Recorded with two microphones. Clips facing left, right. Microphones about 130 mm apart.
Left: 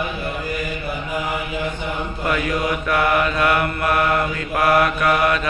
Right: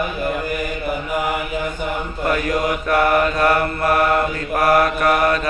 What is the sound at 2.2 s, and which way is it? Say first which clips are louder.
Mantra: right 2 dB; 40° right (ahead or behind).